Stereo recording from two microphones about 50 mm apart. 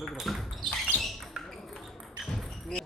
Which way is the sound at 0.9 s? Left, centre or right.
Left.